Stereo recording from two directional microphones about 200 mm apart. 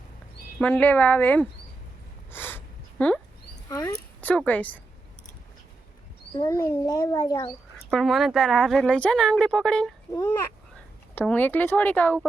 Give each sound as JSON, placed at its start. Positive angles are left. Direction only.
{"t": 0.6, "sound": "speech", "side_deg": 10}
{"t": 2.3, "sound": "a sound", "side_deg": 10}
{"t": 6.3, "sound": "a child's voice", "side_deg": 20}
{"t": 7.9, "sound": "speech", "side_deg": 0}
{"t": 11.1, "sound": "speech", "side_deg": 10}